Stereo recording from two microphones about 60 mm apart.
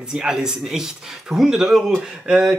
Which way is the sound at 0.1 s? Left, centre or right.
Centre.